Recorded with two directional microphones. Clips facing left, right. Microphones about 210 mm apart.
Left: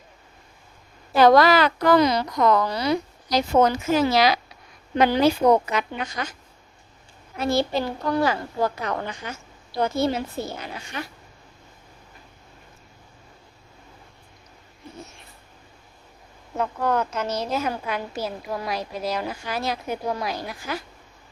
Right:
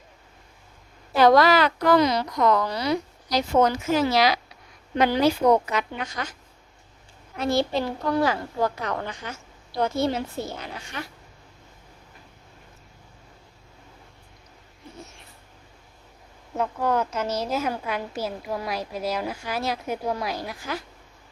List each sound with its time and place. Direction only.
1.3 s a woman's voice: 40° left (ahead or behind); by 6.2 s 20° left (ahead or behind)
7.3 s a woman's voice: 5° left (ahead or behind)
16.6 s a woman's voice: 5° right (ahead or behind)